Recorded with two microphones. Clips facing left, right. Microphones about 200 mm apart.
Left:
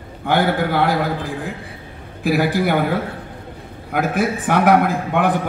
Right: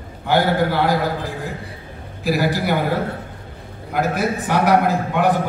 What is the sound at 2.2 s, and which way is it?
Speech, 55° left (ahead or behind).